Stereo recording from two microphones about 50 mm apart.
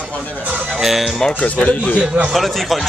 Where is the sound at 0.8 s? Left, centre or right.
Centre.